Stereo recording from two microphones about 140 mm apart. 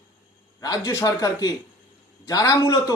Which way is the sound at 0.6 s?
25° left (ahead or behind).